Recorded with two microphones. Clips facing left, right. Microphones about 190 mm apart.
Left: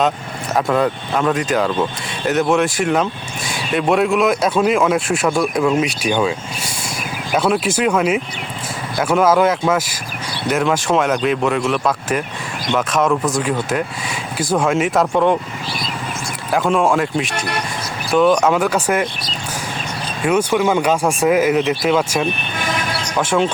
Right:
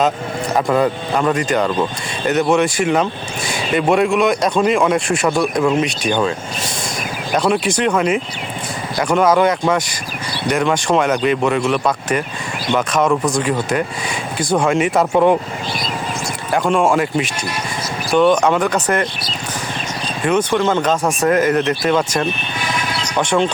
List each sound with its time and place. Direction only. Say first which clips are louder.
0.5 s speech: right 1 dB; centre (ahead or behind)
7.3 s speech: even; centre (ahead or behind)
16.5 s speech: even; centre (ahead or behind)
17.3 s speech: left 2 dB; 60° left (ahead or behind)
18.1 s speech: even; centre (ahead or behind)
20.2 s speech: even; 5° left (ahead or behind)